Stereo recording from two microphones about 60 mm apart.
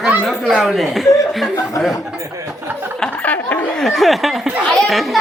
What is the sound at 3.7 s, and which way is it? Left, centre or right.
Speech, centre.